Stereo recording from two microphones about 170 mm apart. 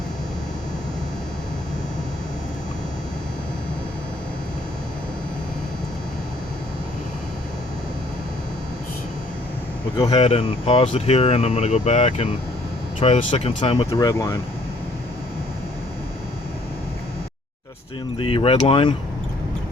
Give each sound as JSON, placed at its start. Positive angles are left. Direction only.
{"t": 10.0, "sound": "speech", "side_deg": 30}
{"t": 18.2, "sound": "speech", "side_deg": 30}